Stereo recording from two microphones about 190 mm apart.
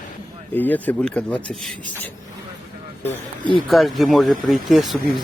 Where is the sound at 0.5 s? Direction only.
10° left (ahead or behind).